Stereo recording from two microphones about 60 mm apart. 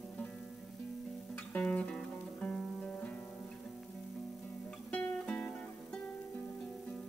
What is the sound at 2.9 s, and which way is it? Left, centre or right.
Guitar, left.